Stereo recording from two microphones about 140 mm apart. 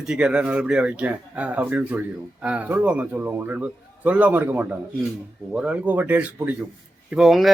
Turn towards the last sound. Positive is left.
turn(degrees=0)  # may be behind; listen again after turning